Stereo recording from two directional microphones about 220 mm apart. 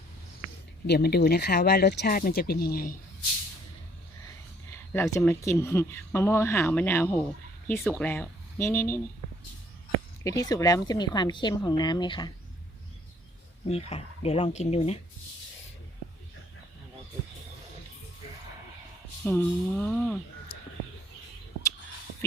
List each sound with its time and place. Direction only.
0.9 s speech: 45° left (ahead or behind)
4.9 s speech: 10° left (ahead or behind)
10.2 s a woman's voice: 15° left (ahead or behind)
13.7 s a woman's voice: 30° left (ahead or behind)
19.2 s speech: 10° left (ahead or behind)